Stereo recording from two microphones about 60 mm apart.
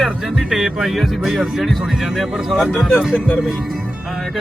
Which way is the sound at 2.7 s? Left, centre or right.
Left.